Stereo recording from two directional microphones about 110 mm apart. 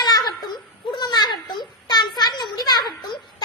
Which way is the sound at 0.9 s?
40° left (ahead or behind).